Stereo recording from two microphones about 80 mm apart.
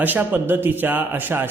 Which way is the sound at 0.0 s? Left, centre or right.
Right.